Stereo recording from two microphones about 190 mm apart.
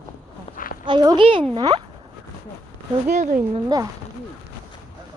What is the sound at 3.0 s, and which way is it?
Speech, 40° right (ahead or behind).